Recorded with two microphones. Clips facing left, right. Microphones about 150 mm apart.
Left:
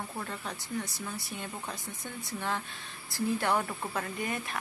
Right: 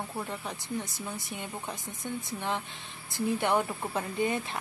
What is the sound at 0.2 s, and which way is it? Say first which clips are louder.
Speech: right 2 dB; 15° right (ahead or behind).